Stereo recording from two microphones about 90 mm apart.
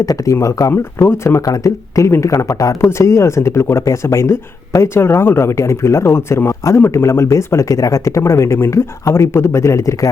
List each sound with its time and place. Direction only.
0.0 s speech: 40° left (ahead or behind)
0.7 s speech: 30° left (ahead or behind)